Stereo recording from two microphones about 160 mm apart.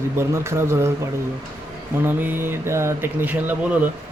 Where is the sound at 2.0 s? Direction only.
10° right (ahead or behind).